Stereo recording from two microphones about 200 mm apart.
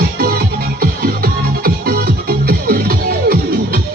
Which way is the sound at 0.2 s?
50° right (ahead or behind).